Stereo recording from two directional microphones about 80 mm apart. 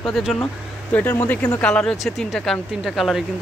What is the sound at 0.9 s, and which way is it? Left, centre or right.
Speech, centre.